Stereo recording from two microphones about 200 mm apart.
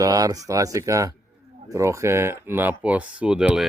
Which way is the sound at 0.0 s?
15° right (ahead or behind).